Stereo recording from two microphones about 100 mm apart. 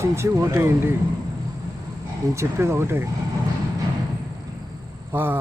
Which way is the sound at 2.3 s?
25° right (ahead or behind).